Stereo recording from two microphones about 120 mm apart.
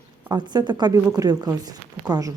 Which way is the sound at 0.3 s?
35° right (ahead or behind).